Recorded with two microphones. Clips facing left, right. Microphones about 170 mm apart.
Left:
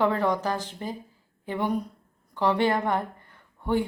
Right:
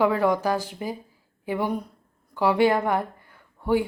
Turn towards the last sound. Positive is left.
turn(degrees=-5)  # may be behind; listen again after turning